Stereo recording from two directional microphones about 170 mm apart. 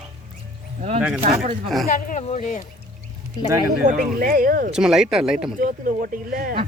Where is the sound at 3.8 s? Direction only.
50° right (ahead or behind).